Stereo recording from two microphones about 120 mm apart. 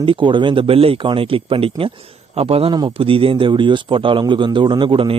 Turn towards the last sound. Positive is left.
turn(degrees=-45)  # may be behind; listen again after turning